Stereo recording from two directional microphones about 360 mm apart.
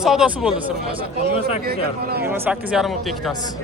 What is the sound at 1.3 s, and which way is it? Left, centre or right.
Speech, centre.